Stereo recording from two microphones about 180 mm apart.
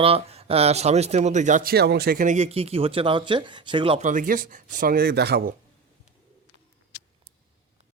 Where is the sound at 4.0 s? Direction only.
45° right (ahead or behind); by 5.5 s 60° right (ahead or behind).